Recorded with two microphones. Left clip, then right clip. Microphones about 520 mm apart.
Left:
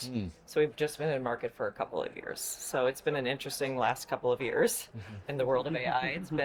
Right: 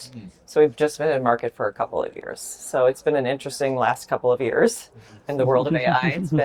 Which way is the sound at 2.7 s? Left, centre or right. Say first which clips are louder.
Right 11 dB; right.